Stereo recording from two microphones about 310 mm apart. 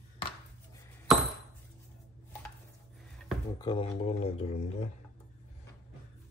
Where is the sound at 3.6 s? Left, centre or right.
Centre.